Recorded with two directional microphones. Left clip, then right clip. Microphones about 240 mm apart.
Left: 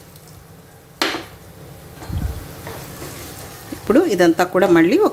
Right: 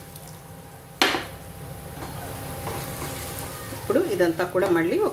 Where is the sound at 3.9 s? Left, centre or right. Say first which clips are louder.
Left 8 dB; left.